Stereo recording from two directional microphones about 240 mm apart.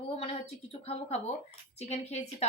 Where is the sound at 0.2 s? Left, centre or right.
Left.